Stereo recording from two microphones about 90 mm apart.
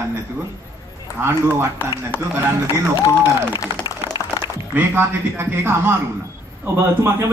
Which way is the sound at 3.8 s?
50° left (ahead or behind).